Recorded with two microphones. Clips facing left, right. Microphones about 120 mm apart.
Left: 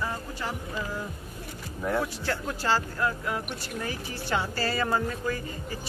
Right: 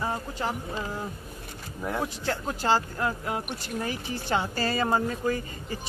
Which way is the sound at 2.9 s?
30° right (ahead or behind).